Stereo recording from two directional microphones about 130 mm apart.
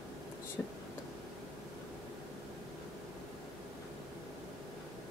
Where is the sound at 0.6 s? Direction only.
15° left (ahead or behind).